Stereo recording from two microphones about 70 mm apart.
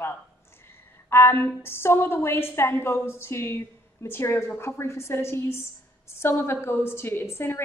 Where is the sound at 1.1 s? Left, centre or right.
Left.